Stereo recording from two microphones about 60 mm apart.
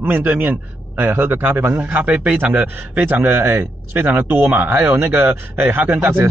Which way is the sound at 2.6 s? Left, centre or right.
Right.